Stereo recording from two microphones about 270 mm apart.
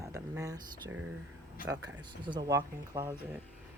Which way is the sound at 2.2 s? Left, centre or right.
Centre.